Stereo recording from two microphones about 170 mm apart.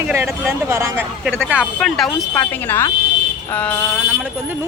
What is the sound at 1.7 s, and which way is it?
Speech, centre (ahead or behind).